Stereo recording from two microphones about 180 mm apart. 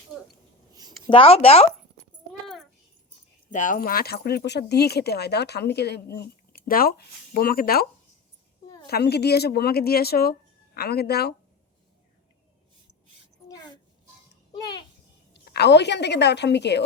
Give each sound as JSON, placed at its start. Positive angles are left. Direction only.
{"t": 1.1, "sound": "speech", "side_deg": 35}
{"t": 3.5, "sound": "speech", "side_deg": 45}
{"t": 8.9, "sound": "speech", "side_deg": 65}
{"t": 14.5, "sound": "a sound", "side_deg": 25}
{"t": 15.3, "sound": "a woman's voice", "side_deg": 65}